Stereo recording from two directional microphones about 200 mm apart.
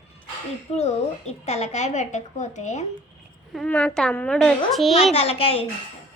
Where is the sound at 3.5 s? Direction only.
5° left (ahead or behind).